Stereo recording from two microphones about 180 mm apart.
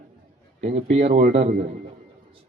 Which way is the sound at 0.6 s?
35° right (ahead or behind).